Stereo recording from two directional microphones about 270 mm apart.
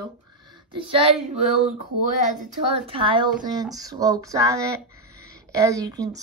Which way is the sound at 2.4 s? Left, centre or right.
Centre.